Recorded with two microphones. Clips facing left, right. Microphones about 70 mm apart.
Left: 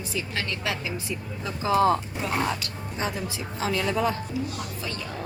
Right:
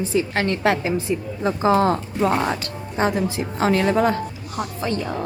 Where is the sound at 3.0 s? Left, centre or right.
Right.